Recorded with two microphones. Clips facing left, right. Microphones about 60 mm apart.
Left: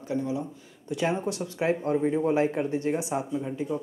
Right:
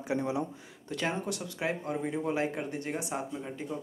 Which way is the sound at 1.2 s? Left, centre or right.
Left.